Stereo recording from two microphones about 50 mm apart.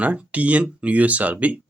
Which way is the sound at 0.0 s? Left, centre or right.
Right.